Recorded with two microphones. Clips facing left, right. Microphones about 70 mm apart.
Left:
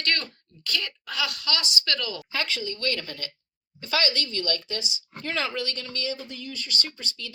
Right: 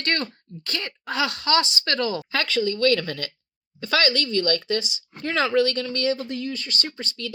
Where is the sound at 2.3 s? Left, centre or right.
Right.